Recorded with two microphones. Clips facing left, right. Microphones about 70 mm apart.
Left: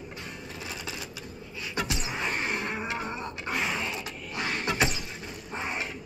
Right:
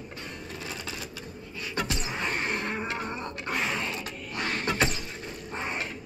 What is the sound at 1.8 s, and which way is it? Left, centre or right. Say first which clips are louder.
Roaring cats: even; centre.